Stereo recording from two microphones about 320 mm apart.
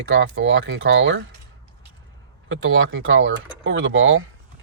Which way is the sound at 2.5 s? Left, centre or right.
Right.